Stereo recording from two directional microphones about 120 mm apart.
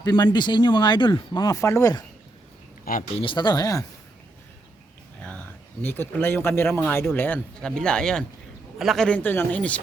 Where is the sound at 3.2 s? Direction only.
40° left (ahead or behind).